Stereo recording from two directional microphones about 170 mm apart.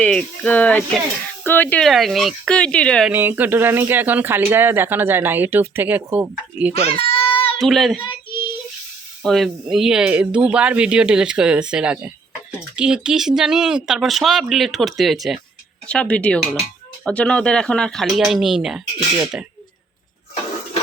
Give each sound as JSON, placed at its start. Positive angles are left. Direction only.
{"t": 0.0, "sound": "a sound", "side_deg": 5}
{"t": 1.5, "sound": "speech", "side_deg": 10}
{"t": 3.1, "sound": "speech", "side_deg": -10}
{"t": 7.3, "sound": "a sound", "side_deg": 30}
{"t": 7.6, "sound": "speech", "side_deg": 0}
{"t": 9.2, "sound": "speech", "side_deg": 0}